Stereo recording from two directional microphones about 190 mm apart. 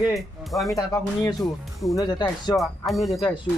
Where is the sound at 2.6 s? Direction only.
Centre (ahead or behind).